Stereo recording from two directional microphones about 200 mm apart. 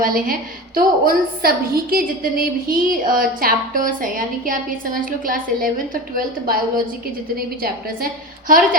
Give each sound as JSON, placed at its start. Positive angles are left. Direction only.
{"t": 0.0, "sound": "a woman's voice", "side_deg": -45}